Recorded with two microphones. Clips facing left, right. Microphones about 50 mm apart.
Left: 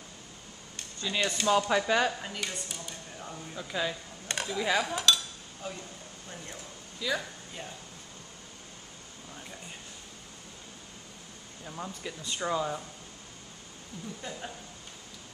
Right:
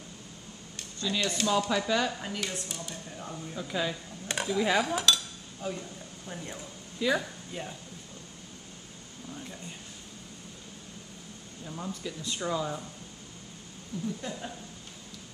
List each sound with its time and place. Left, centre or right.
1.0 s speech: centre
1.7 s speech: left
2.1 s speech: centre
6.2 s speech: centre
7.2 s speech: centre
11.6 s speech: centre
13.9 s speech: centre